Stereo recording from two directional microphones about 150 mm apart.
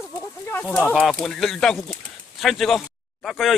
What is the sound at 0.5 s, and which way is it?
Speech, 10° left (ahead or behind).